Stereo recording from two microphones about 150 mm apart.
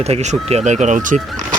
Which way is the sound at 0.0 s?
45° right (ahead or behind).